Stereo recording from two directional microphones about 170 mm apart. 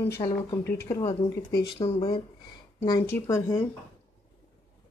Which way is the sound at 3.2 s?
15° left (ahead or behind).